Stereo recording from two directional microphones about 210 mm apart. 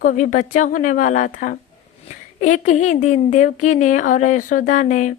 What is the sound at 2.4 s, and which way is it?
A woman's voice, 35° left (ahead or behind).